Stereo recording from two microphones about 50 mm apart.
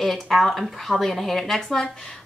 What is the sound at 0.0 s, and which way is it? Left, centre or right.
Speech, centre.